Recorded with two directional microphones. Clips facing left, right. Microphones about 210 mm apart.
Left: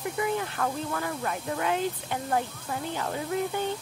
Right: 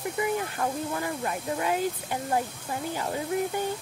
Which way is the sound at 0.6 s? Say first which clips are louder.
Right 1 dB; 20° right (ahead or behind).